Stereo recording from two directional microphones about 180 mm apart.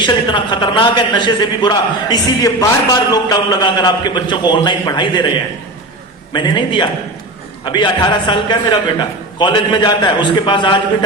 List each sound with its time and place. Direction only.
0.0 s a man's voice: 25° left (ahead or behind)
6.3 s a man's voice: 25° left (ahead or behind)